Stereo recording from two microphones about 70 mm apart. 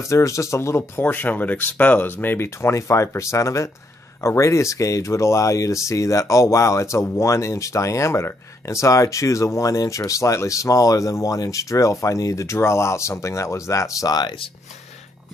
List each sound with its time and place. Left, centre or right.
0.0 s speech: left
1.0 s speech: left